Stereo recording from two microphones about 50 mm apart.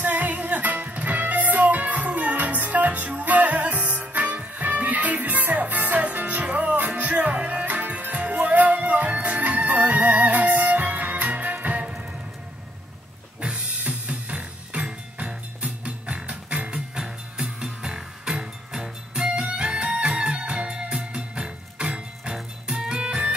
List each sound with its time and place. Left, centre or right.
0.0 s music: right
13.4 s music: right